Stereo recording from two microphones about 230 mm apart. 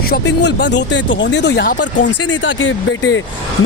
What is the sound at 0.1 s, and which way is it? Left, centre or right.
Speech, left.